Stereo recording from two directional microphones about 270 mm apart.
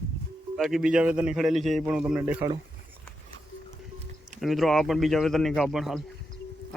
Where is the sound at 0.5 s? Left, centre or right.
Centre.